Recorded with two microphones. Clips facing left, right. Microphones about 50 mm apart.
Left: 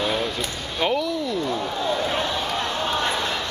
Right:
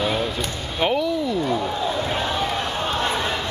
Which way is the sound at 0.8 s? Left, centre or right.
Centre.